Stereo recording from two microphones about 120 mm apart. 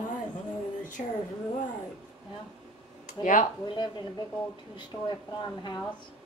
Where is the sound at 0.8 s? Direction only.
90° left.